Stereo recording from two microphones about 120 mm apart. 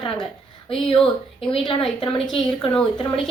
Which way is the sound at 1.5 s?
50° left (ahead or behind).